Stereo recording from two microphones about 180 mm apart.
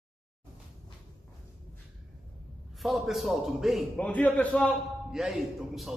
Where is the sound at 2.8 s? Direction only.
Centre (ahead or behind).